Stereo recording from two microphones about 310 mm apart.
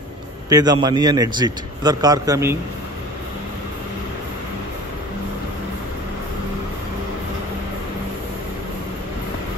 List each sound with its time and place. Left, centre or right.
0.5 s a man's voice: centre